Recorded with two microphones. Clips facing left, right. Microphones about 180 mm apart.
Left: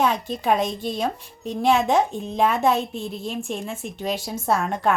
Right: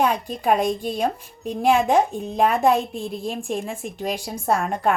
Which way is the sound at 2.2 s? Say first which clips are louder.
Right 2 dB; centre (ahead or behind).